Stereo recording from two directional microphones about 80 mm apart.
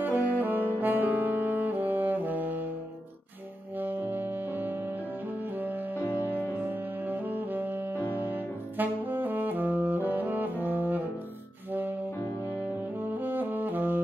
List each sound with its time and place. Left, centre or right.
0.0 s saxophone: right
3.7 s saxophone: right
5.4 s music: right
6.7 s saxophone: right
10.6 s brass instrument: right
13.2 s saxophone: right